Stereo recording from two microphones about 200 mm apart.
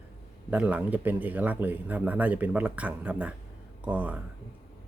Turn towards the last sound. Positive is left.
turn(degrees=-5)  # may be behind; listen again after turning